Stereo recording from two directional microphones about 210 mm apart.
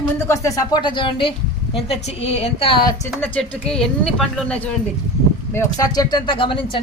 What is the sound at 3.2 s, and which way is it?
Speech, 5° left (ahead or behind).